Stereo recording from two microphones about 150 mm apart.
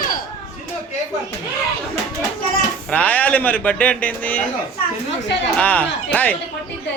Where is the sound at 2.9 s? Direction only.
10° left (ahead or behind).